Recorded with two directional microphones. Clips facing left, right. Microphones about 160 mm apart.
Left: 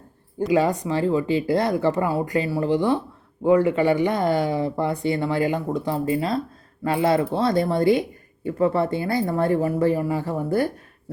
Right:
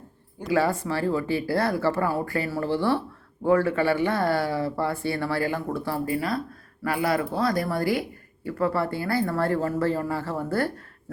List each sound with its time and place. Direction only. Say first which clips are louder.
0.4 s speech: left 3 dB; 20° left (ahead or behind)